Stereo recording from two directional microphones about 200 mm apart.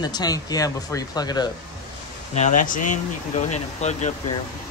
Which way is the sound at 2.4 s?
40° left (ahead or behind).